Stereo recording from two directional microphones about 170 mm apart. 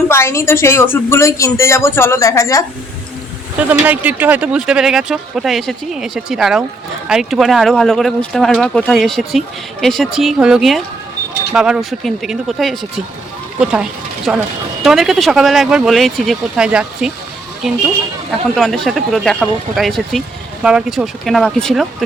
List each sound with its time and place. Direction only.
0.1 s a woman's voice: 15° left (ahead or behind)
3.6 s speech: 10° right (ahead or behind)